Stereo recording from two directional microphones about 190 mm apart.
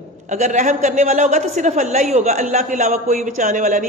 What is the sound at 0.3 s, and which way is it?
A woman's voice, 40° right (ahead or behind).